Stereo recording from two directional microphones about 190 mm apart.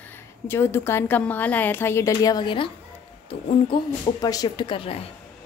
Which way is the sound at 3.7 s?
20° left (ahead or behind).